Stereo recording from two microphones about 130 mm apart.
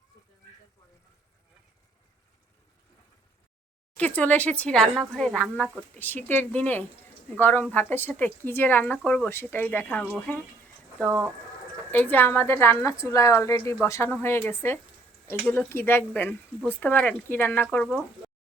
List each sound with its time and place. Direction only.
3.9 s a woman's voice: 10° left (ahead or behind)
11.0 s speech: 20° right (ahead or behind)
11.9 s a woman's voice: 15° left (ahead or behind)